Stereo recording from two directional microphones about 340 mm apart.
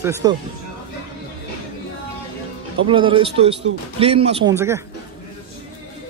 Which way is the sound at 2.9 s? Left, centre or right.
Centre.